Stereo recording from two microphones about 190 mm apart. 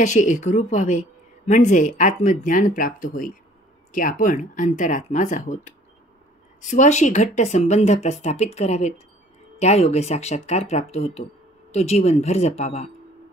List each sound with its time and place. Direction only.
0.0 s a woman's voice: 40° left (ahead or behind)